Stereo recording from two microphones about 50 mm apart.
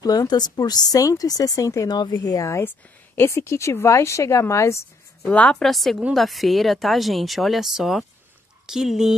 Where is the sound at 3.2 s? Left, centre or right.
Left.